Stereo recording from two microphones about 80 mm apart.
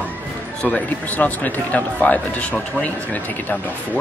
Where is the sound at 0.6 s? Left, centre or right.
Centre.